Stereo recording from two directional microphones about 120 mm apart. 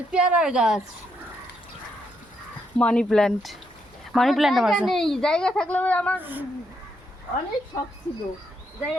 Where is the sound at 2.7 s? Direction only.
10° left (ahead or behind).